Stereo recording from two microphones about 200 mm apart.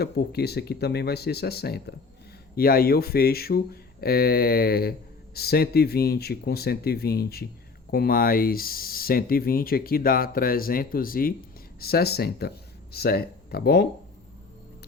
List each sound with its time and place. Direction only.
0.0 s speech: 55° left (ahead or behind)